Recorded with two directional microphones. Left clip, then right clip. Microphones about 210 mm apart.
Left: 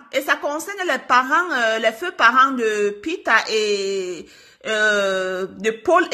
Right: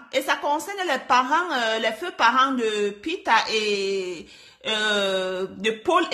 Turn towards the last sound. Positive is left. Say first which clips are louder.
# left 4 dB
turn(degrees=10)  # may be behind; listen again after turning